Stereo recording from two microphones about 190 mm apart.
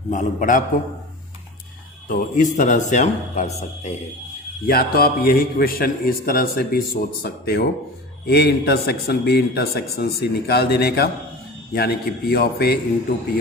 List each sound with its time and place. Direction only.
0.1 s speech: 40° left (ahead or behind)
2.0 s speech: 40° left (ahead or behind)
4.6 s a man's voice: 50° left (ahead or behind)